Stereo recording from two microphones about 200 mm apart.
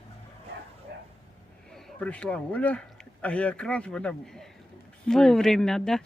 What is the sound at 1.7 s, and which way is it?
A man's voice, 5° left (ahead or behind).